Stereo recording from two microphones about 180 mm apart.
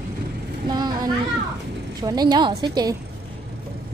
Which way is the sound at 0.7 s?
20° right (ahead or behind).